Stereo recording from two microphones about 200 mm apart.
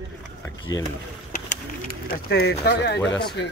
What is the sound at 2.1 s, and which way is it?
Speech, 55° left (ahead or behind).